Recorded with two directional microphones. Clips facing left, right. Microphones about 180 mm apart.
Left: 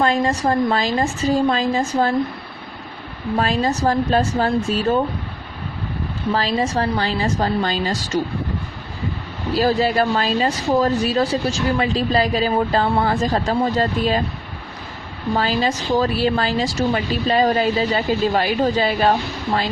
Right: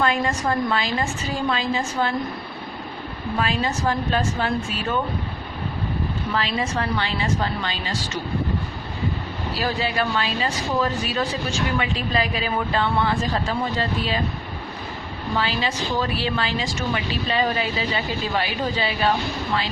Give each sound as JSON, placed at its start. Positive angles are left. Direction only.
{"t": 0.0, "sound": "a woman's voice", "side_deg": 35}
{"t": 3.3, "sound": "a woman's voice", "side_deg": 40}
{"t": 6.3, "sound": "a woman's voice", "side_deg": 35}
{"t": 9.6, "sound": "a woman's voice", "side_deg": 40}
{"t": 15.4, "sound": "a woman's voice", "side_deg": 40}